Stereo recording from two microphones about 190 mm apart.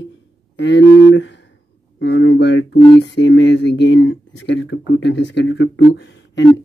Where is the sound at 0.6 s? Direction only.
70° left (ahead or behind).